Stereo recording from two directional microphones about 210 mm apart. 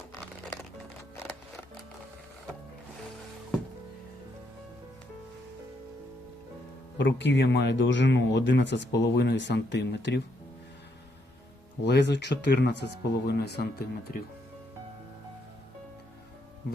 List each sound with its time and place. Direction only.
7.0 s speech: 55° left (ahead or behind)
11.9 s speech: 55° left (ahead or behind)